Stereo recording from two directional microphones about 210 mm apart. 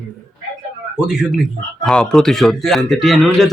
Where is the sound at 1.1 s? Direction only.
5° right (ahead or behind).